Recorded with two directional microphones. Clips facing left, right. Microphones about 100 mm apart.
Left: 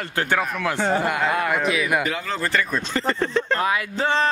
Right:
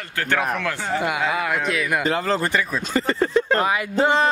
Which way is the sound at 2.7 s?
5° right (ahead or behind).